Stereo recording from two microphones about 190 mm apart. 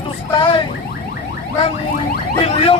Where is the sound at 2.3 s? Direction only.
30° left (ahead or behind).